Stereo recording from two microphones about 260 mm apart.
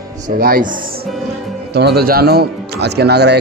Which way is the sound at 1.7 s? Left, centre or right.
Right.